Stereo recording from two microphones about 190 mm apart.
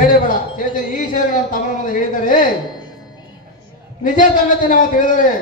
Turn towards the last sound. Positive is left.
turn(degrees=45)  # may be behind; listen again after turning